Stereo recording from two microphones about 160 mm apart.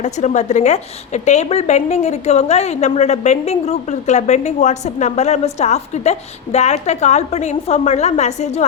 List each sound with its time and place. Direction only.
0.0 s a woman's voice: 50° left (ahead or behind)